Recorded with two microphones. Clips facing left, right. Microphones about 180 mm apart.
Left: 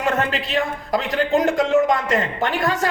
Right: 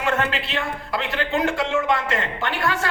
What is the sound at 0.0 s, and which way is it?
A man's voice, 40° left (ahead or behind).